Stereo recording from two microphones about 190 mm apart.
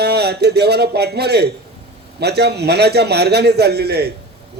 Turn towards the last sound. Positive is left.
turn(degrees=-60)  # may be behind; listen again after turning